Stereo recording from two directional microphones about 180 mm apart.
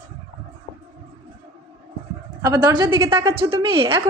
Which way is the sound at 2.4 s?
20° right (ahead or behind).